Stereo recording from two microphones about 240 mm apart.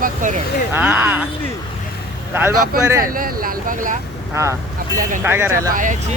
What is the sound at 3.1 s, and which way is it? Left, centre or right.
Speech, right.